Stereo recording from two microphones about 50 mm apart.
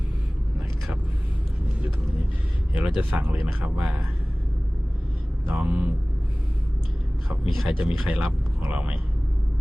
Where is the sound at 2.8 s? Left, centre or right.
Right.